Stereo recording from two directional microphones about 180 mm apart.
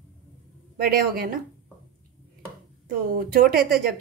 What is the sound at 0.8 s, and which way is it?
Speech, 55° right (ahead or behind).